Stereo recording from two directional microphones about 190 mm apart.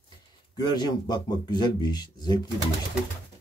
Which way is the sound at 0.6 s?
20° left (ahead or behind).